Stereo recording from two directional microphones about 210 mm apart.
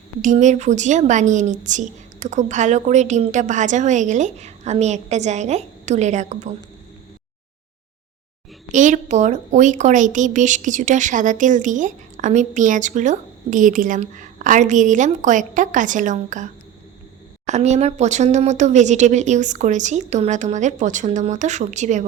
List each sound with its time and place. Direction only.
0.2 s a woman's voice: 35° right (ahead or behind)
8.7 s a woman's voice: 35° right (ahead or behind)